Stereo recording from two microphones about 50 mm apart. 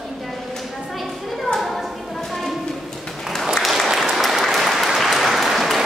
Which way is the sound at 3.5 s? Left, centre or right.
Centre.